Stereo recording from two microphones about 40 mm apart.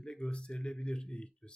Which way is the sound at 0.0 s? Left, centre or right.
Left.